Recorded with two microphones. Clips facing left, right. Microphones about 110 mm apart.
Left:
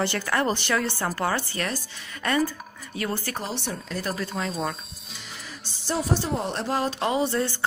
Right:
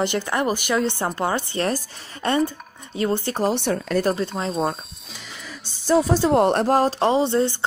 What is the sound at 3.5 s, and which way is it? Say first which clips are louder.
Speech: right 10 dB; 60° right (ahead or behind).